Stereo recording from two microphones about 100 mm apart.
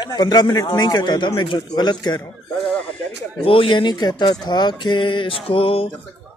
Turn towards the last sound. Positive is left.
turn(degrees=70)  # may be behind; listen again after turning